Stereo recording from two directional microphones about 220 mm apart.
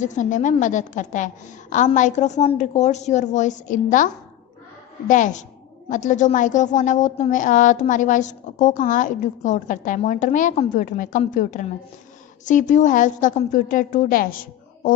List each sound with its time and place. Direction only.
0.0 s a woman's voice: 35° left (ahead or behind)